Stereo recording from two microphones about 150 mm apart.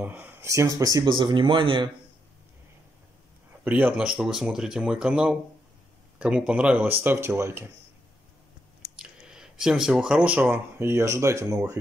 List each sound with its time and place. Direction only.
0.0 s speech: 10° right (ahead or behind); by 1.9 s 30° right (ahead or behind)
3.6 s speech: 10° right (ahead or behind)
9.3 s speech: 5° right (ahead or behind); by 11.8 s 25° right (ahead or behind)